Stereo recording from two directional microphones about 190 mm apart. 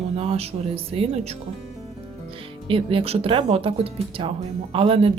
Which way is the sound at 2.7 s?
30° right (ahead or behind).